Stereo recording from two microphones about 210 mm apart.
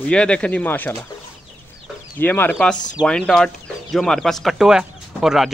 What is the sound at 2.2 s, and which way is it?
Speech, 10° left (ahead or behind).